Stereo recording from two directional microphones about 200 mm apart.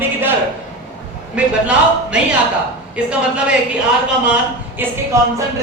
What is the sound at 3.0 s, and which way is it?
Speech, 5° right (ahead or behind).